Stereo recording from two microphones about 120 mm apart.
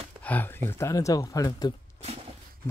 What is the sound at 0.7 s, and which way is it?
Speech, 25° left (ahead or behind).